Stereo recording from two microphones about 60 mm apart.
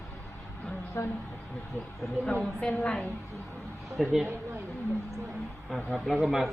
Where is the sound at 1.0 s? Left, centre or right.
Left.